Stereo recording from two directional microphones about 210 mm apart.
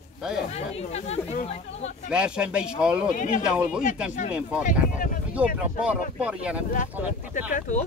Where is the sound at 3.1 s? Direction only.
35° left (ahead or behind).